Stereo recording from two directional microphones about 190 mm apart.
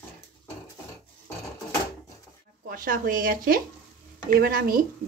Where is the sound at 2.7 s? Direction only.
45° right (ahead or behind).